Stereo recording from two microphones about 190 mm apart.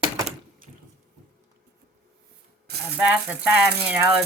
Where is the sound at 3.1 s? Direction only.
5° right (ahead or behind).